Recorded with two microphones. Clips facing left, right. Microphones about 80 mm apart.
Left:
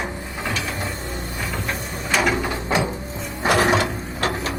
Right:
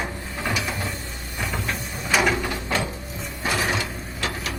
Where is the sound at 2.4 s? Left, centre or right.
Left.